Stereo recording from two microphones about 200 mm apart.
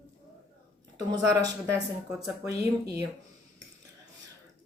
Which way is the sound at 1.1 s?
20° right (ahead or behind).